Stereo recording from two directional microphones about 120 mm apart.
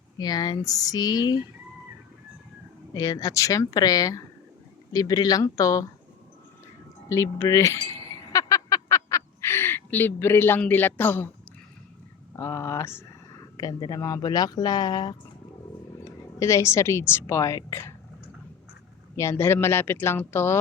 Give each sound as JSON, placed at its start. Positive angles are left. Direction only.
{"t": 0.2, "sound": "speech", "side_deg": 35}
{"t": 2.9, "sound": "speech", "side_deg": 30}
{"t": 7.1, "sound": "chink", "side_deg": 25}
{"t": 12.4, "sound": "speech", "side_deg": 20}
{"t": 13.6, "sound": "a woman's voice", "side_deg": 35}
{"t": 19.1, "sound": "speech", "side_deg": 25}